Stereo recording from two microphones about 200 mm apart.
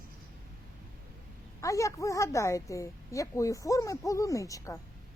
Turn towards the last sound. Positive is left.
turn(degrees=15)  # may be behind; listen again after turning